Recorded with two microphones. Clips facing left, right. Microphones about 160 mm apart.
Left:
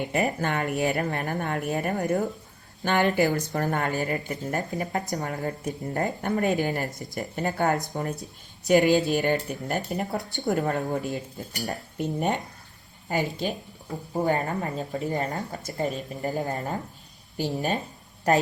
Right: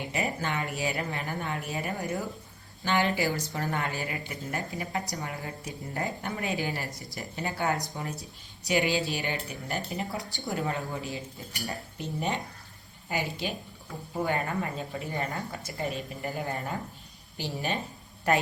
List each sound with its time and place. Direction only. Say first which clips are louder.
0.1 s speech: left 3 dB; 50° left (ahead or behind)